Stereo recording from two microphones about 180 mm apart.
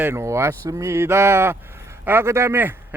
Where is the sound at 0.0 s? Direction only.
15° right (ahead or behind).